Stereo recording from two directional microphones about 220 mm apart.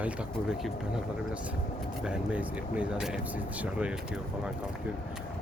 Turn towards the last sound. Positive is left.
turn(degrees=-5)  # may be behind; listen again after turning